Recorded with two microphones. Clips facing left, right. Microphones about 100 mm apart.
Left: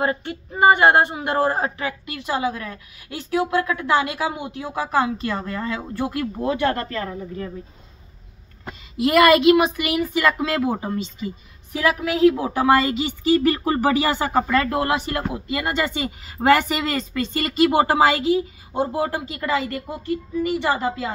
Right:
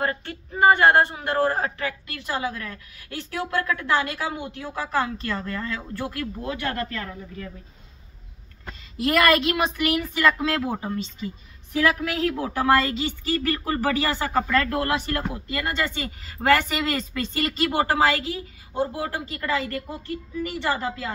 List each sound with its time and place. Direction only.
0.0 s speech: 15° left (ahead or behind)
6.3 s speech: 30° left (ahead or behind)
8.6 s speech: 10° left (ahead or behind)